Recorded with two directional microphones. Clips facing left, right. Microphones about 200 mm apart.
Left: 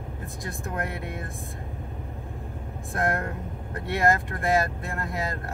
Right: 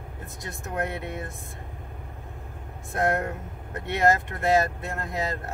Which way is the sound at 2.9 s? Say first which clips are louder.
Right 2 dB; 20° right (ahead or behind).